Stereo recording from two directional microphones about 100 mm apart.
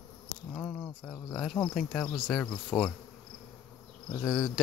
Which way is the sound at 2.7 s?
20° left (ahead or behind).